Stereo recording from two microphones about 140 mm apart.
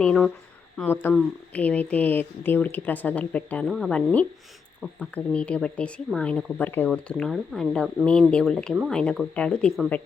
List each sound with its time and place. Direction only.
0.0 s speech: 5° left (ahead or behind)
0.8 s speech: 15° left (ahead or behind)